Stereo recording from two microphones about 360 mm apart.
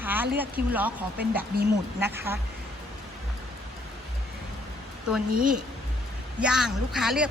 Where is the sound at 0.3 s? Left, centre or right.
Centre.